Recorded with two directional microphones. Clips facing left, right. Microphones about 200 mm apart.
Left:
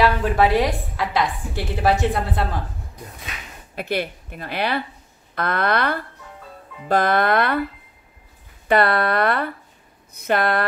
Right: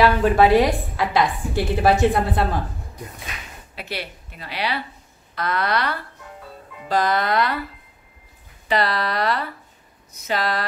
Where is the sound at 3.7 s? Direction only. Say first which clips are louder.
Left 7 dB; 50° left (ahead or behind).